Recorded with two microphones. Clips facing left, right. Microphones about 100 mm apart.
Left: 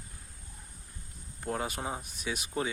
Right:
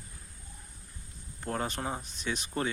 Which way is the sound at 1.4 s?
5° left (ahead or behind).